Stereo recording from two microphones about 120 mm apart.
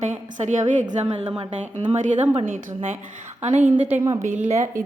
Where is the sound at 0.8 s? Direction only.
90° right.